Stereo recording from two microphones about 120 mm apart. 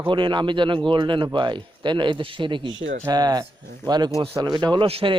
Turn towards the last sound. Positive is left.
turn(degrees=-50)  # may be behind; listen again after turning